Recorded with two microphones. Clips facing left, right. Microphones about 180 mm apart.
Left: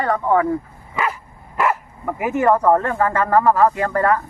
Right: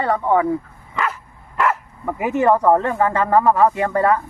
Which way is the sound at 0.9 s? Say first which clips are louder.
Left 1 dB; 5° left (ahead or behind).